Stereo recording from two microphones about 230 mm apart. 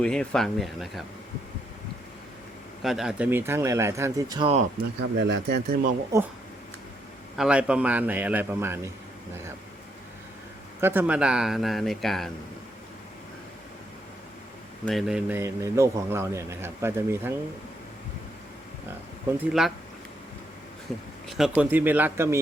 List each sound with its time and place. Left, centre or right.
0.0 s speech: centre
2.8 s a man's voice: centre; by 4.6 s right
5.2 s speech: right
6.1 s a man's voice: centre
7.3 s a man's voice: centre
10.8 s speech: centre
14.8 s a man's voice: centre
19.4 s speech: centre
21.2 s a man's voice: centre